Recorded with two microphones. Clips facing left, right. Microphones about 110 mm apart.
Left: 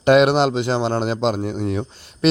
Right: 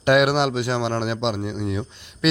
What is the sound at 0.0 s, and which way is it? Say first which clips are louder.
Speech: left 4 dB; 30° left (ahead or behind).